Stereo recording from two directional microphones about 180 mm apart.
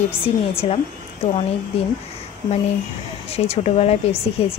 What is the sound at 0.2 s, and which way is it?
Speech, 35° left (ahead or behind).